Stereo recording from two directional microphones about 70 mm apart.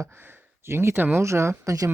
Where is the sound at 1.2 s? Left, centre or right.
Right.